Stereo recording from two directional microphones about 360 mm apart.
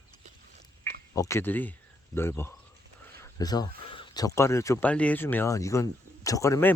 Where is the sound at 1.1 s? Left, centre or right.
Centre.